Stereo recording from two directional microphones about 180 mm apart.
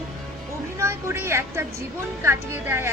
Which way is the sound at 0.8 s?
15° right (ahead or behind).